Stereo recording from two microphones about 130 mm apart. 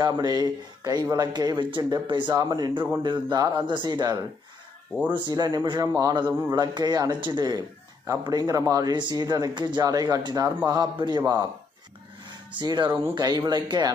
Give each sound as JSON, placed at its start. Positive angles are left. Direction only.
{"t": 0.0, "sound": "speech", "side_deg": -30}
{"t": 12.5, "sound": "speech", "side_deg": -35}